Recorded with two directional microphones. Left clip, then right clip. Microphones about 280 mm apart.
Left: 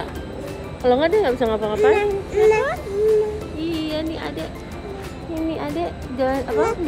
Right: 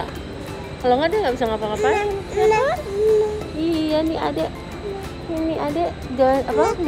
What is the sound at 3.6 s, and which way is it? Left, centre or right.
Music, centre.